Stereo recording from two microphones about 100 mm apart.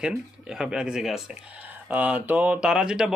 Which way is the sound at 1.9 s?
15° right (ahead or behind).